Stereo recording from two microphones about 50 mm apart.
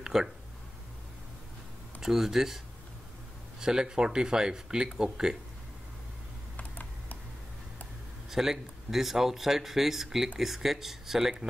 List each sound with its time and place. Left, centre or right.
0.0 s a sound: centre
2.0 s speech: centre
6.5 s computer keyboard: left
8.3 s speech: centre